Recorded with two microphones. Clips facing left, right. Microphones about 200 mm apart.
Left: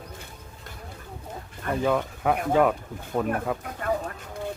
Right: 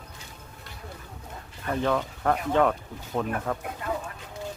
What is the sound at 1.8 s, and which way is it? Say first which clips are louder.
Speech: left 2 dB; 10° left (ahead or behind).